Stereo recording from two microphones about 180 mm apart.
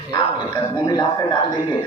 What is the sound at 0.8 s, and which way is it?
Speech, 20° left (ahead or behind).